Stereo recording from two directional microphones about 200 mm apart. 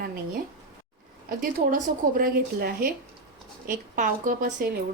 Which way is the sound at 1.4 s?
45° right (ahead or behind).